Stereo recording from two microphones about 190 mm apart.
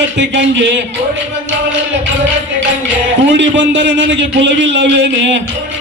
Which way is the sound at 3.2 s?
70° right (ahead or behind).